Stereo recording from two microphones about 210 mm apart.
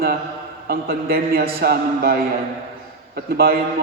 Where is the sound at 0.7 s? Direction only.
45° right (ahead or behind).